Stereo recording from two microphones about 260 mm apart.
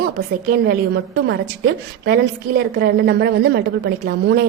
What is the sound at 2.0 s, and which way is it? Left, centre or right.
A woman's voice, right.